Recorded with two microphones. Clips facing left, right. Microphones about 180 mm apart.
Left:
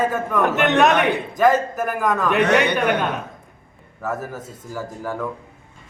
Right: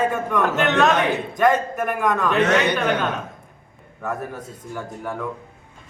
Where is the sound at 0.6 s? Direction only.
20° left (ahead or behind).